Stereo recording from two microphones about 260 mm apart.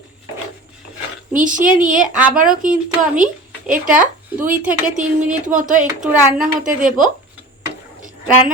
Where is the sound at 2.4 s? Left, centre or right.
Right.